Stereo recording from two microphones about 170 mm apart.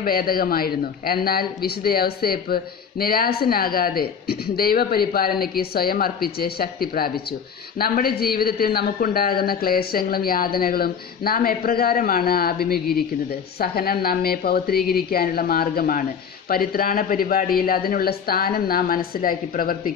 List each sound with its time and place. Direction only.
0.0 s a woman's voice: 60° left (ahead or behind)